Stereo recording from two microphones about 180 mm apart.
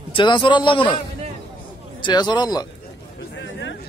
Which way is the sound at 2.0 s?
25° left (ahead or behind).